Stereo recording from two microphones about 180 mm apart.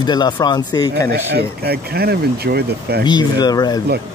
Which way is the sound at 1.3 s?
60° right (ahead or behind).